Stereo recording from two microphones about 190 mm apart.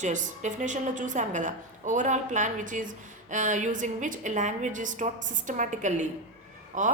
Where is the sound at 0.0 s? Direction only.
40° right (ahead or behind).